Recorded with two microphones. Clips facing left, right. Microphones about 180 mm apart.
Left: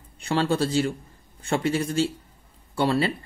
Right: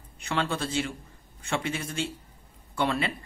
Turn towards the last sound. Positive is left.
turn(degrees=35)  # may be behind; listen again after turning